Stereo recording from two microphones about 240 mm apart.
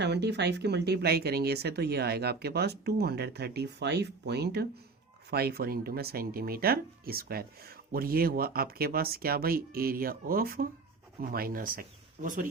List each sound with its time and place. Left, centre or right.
0.0 s speech: right